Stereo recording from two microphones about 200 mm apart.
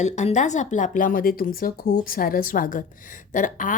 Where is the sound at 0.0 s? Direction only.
35° left (ahead or behind).